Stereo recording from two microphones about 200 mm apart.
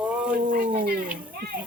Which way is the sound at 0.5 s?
45° right (ahead or behind).